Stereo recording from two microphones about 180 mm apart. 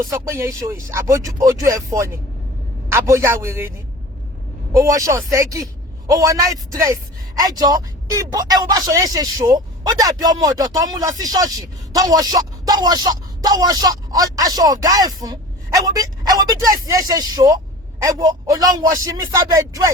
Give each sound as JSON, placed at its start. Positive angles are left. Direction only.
{"t": 0.0, "sound": "speech", "side_deg": -20}
{"t": 4.8, "sound": "a man's voice", "side_deg": -20}